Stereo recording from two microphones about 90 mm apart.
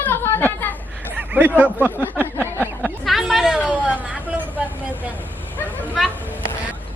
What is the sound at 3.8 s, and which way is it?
Speech, 15° right (ahead or behind).